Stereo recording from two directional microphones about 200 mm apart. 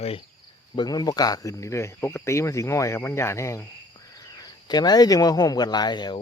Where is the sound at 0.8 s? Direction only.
20° left (ahead or behind).